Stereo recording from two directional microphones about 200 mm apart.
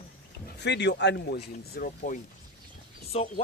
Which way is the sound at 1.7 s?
40° left (ahead or behind).